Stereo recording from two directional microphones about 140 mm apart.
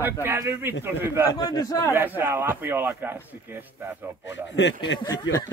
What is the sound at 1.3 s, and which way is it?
Speech, 30° left (ahead or behind).